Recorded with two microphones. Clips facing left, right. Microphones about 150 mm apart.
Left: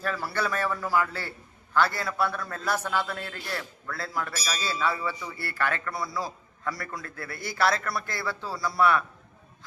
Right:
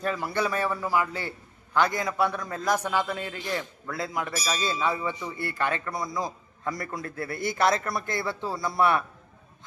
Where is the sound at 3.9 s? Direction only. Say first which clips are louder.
Right 2 dB; 20° right (ahead or behind).